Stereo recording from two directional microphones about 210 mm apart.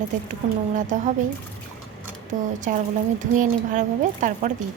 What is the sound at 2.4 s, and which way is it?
A woman's voice, 35° right (ahead or behind).